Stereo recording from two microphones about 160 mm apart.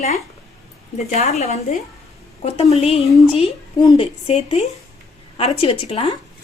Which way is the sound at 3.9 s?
40° left (ahead or behind).